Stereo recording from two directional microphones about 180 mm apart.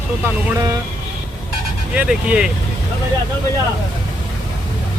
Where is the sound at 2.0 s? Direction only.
5° right (ahead or behind).